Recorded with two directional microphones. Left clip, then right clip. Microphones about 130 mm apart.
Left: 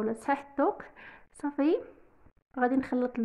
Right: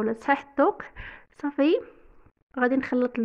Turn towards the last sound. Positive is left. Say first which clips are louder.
# right 5 dB
turn(degrees=-15)  # may be behind; listen again after turning